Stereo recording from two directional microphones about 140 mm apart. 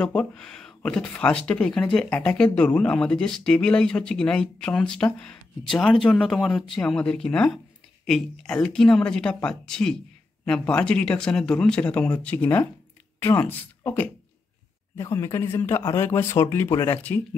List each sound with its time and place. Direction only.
0.0 s speech: 5° left (ahead or behind)